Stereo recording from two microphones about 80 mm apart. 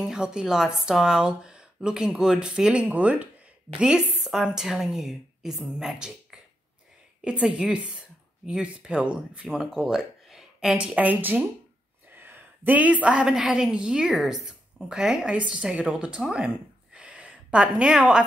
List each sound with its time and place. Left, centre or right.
0.0 s a woman's voice: centre
7.4 s speech: centre
9.5 s speech: centre; by 11.4 s right
12.1 s a sound: right
13.3 s a woman's voice: centre